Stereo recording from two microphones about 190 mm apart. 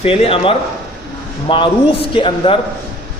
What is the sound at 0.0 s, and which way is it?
A man's voice, 30° left (ahead or behind).